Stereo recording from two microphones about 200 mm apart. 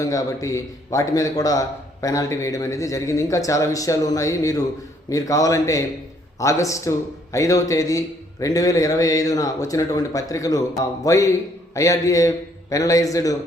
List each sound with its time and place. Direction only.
0.0 s a man's voice: 15° left (ahead or behind)